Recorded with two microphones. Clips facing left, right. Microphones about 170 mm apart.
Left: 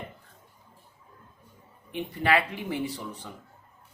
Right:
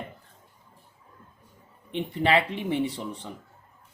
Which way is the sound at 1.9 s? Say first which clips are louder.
Right 2 dB; 25° right (ahead or behind).